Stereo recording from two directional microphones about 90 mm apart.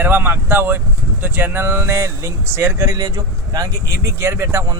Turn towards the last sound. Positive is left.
turn(degrees=-30)  # may be behind; listen again after turning